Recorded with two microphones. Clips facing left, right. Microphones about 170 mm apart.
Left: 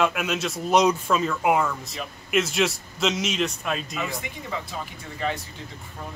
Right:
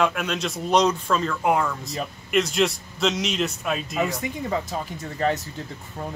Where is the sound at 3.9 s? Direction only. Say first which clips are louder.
Right 6 dB; 45° right (ahead or behind).